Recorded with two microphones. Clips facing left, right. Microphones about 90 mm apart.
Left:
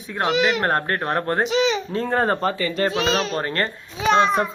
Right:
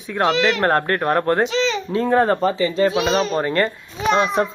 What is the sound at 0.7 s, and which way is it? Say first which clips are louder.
Speech: right 4 dB; 25° left (ahead or behind).